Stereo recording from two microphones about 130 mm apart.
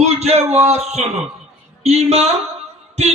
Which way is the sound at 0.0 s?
55° right (ahead or behind).